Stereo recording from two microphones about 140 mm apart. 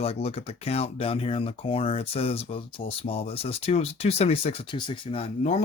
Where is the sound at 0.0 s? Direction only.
45° left (ahead or behind).